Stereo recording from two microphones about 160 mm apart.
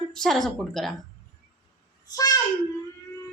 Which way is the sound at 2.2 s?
25° left (ahead or behind).